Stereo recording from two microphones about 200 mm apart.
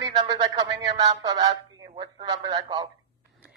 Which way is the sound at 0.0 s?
20° right (ahead or behind).